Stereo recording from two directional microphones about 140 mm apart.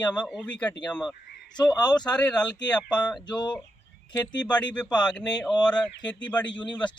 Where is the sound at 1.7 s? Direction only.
30° left (ahead or behind).